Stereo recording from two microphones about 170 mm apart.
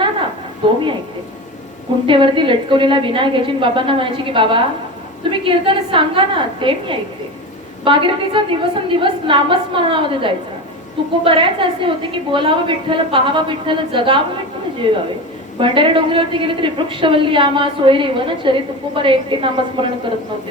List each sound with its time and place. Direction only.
0.6 s a woman's voice: 30° right (ahead or behind)
2.0 s a woman's voice: 30° right (ahead or behind)